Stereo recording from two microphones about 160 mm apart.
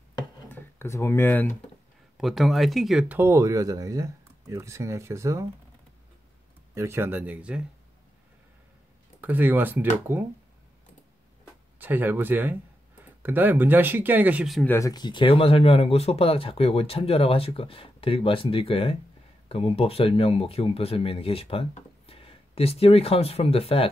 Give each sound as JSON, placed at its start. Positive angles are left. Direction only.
{"t": 0.5, "sound": "speech", "side_deg": 15}
{"t": 2.1, "sound": "speech", "side_deg": 0}
{"t": 6.7, "sound": "speech", "side_deg": -15}
{"t": 9.2, "sound": "speech", "side_deg": -10}
{"t": 11.8, "sound": "speech", "side_deg": -10}
{"t": 14.6, "sound": "speech", "side_deg": 15}
{"t": 14.9, "sound": "speech", "side_deg": 25}